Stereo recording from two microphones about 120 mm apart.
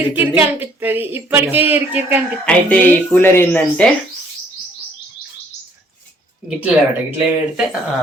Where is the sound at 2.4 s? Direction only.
10° left (ahead or behind).